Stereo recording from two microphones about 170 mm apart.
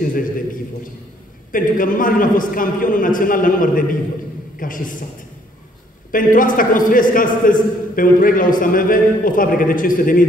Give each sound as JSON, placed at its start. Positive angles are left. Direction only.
{"t": 0.0, "sound": "a man's voice", "side_deg": 55}
{"t": 1.5, "sound": "a man's voice", "side_deg": 55}
{"t": 6.1, "sound": "a man's voice", "side_deg": 55}